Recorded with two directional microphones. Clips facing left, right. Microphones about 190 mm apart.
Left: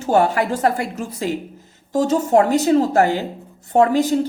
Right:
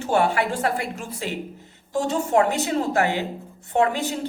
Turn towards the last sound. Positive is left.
turn(degrees=40)  # may be behind; listen again after turning